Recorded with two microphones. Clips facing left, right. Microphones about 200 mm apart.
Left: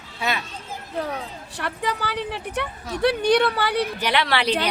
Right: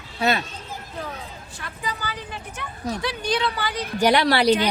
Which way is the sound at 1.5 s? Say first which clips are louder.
Left 6 dB; 70° left (ahead or behind).